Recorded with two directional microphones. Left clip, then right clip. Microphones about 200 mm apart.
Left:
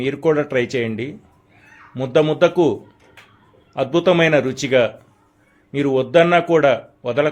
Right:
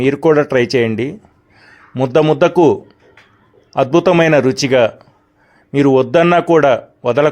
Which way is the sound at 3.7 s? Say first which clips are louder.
Right 5 dB; 40° right (ahead or behind).